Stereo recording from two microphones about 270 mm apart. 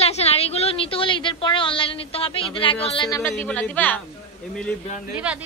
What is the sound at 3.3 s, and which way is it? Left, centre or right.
Speech, centre.